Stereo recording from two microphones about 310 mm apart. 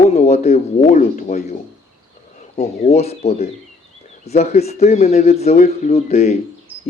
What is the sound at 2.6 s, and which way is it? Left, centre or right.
Speech, left.